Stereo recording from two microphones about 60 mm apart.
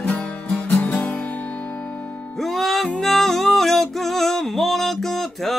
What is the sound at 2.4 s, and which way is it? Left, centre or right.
Music, centre.